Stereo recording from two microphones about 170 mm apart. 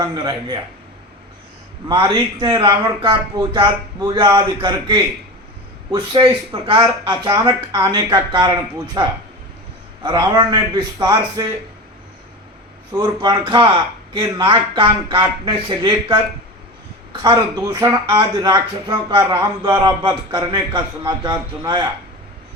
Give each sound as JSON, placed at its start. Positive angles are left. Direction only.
{"t": 0.0, "sound": "speech", "side_deg": -25}
{"t": 1.9, "sound": "speech", "side_deg": -30}
{"t": 13.2, "sound": "speech", "side_deg": -25}